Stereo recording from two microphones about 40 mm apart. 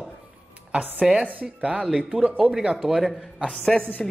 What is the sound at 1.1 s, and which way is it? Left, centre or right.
Speech, right.